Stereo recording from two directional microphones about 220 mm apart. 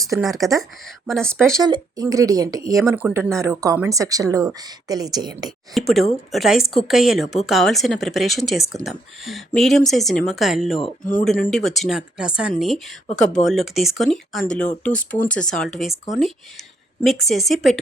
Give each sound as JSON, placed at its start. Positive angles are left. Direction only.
{"t": 0.6, "sound": "a woman's voice", "side_deg": 0}
{"t": 1.5, "sound": "speech", "side_deg": -15}
{"t": 2.7, "sound": "speech", "side_deg": -5}
{"t": 5.7, "sound": "a woman's voice", "side_deg": 0}